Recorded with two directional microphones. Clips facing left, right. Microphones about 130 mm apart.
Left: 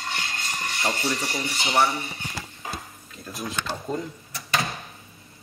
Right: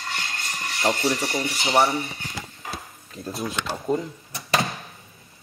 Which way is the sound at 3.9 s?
15° right (ahead or behind).